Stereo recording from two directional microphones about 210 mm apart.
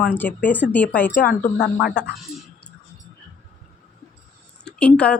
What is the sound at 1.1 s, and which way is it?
Speech, 40° left (ahead or behind).